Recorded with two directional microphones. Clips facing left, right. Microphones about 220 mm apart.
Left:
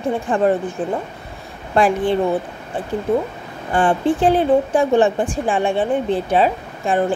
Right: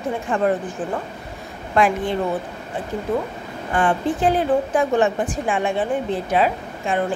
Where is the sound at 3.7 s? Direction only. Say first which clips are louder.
Left 4 dB; 30° left (ahead or behind).